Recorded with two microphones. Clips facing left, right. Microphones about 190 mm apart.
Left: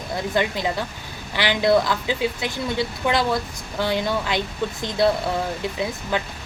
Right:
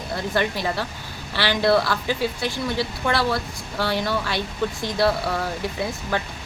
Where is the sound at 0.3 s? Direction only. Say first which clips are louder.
Left 1 dB; 20° left (ahead or behind).